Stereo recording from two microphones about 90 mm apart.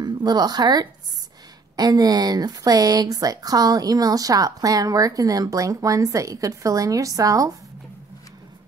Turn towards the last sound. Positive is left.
turn(degrees=-40)  # may be behind; listen again after turning